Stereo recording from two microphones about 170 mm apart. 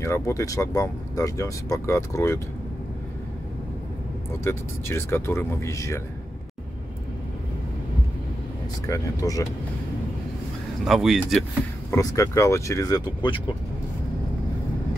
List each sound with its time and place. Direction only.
0.0 s speech: 15° left (ahead or behind)
4.5 s speech: 15° left (ahead or behind)
9.2 s speech: 20° left (ahead or behind)
10.9 s speech: centre (ahead or behind)
11.9 s speech: 20° left (ahead or behind)